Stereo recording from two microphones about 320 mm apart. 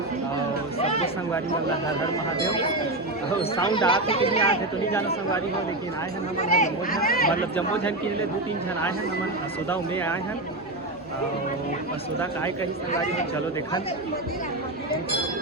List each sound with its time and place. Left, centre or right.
0.8 s a sound: centre
3.5 s speech: centre
6.4 s speech: left
9.6 s speech: centre